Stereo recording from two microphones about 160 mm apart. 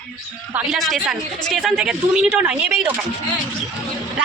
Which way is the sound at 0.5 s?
Centre (ahead or behind).